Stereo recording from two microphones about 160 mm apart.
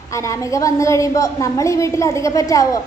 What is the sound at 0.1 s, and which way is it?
A woman's voice, 20° left (ahead or behind).